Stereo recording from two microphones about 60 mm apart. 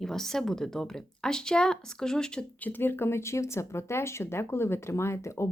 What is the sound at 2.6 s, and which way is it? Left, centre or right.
Speech, left.